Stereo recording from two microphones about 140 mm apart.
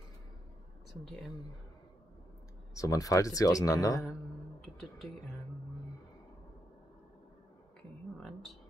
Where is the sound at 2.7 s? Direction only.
25° left (ahead or behind).